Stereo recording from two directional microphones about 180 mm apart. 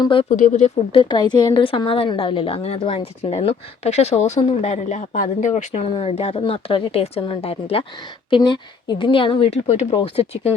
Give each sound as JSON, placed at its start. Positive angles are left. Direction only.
{"t": 0.0, "sound": "speech", "side_deg": 30}
{"t": 0.3, "sound": "speech", "side_deg": 45}
{"t": 0.9, "sound": "a woman's voice", "side_deg": 25}